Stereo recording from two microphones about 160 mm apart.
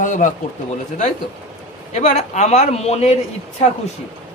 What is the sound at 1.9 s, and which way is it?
Speech, 45° left (ahead or behind).